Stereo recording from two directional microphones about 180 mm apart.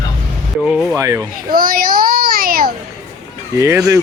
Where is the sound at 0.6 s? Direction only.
Centre (ahead or behind).